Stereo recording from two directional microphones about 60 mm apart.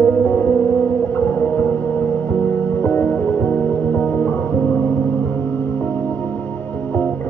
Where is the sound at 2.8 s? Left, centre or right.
Left.